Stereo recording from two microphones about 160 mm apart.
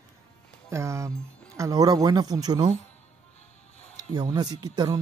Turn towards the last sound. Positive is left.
turn(degrees=-25)  # may be behind; listen again after turning